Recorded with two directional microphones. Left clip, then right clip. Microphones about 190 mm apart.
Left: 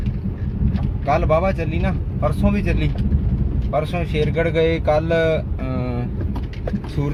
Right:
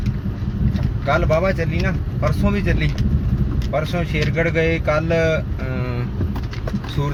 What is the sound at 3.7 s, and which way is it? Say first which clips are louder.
Speech: left 1 dB; 20° left (ahead or behind).